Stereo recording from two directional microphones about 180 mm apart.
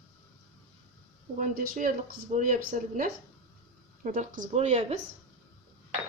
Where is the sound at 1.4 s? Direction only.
50° right (ahead or behind).